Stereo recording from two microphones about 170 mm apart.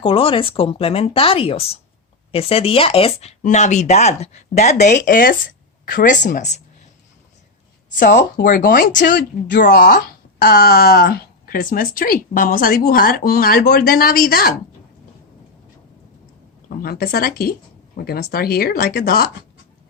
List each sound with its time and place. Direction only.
0.0 s speech: 30° left (ahead or behind)
7.9 s speech: 50° left (ahead or behind)
16.6 s speech: 60° left (ahead or behind)